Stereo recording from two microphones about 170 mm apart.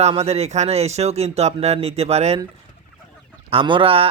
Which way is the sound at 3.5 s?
30° right (ahead or behind).